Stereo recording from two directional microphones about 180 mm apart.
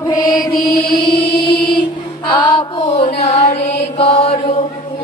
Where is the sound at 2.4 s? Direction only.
35° left (ahead or behind).